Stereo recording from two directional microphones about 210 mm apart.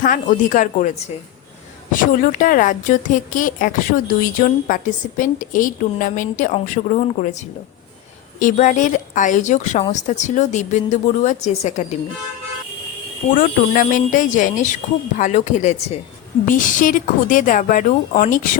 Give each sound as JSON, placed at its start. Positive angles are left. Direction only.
{"t": 0.0, "sound": "a woman's voice", "side_deg": 40}
{"t": 13.3, "sound": "a woman's voice", "side_deg": 40}